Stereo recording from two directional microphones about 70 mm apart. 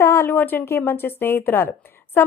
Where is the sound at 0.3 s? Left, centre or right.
Left.